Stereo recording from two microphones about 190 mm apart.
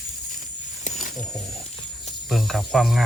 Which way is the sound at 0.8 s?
40° left (ahead or behind).